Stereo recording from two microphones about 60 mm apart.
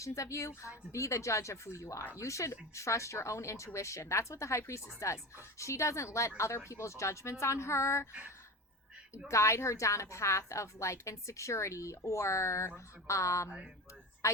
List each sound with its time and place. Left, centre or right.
0.0 s a woman's voice: left
9.3 s a woman's voice: left